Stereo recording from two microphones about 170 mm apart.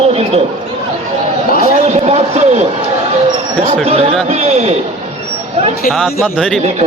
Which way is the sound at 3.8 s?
35° right (ahead or behind).